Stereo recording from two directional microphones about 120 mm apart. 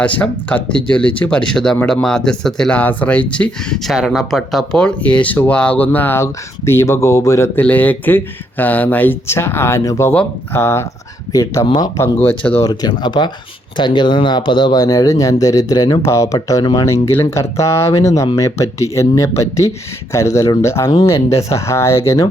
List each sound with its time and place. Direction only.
0.0 s speech: 10° left (ahead or behind)
3.9 s speech: centre (ahead or behind); by 12.5 s 15° left (ahead or behind)
12.6 s speech: 35° left (ahead or behind)